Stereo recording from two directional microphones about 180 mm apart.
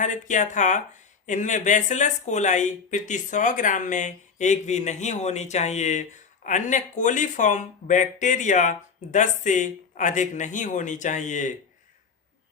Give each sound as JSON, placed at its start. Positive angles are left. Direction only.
{"t": 0.0, "sound": "speech", "side_deg": 45}